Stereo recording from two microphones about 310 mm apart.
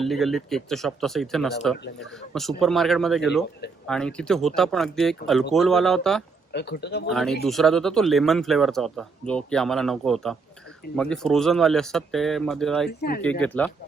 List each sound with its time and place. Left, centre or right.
0.0 s speech: centre
6.5 s speech: left
7.1 s speech: centre
12.9 s speech: left
13.4 s speech: centre